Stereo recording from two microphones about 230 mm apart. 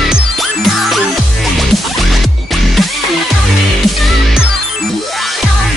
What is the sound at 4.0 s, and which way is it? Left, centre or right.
Music, centre.